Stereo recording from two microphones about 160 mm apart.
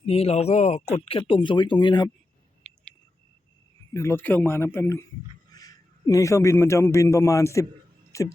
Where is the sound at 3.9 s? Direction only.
15° left (ahead or behind).